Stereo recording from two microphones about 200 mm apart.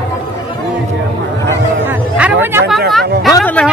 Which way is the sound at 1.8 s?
10° right (ahead or behind).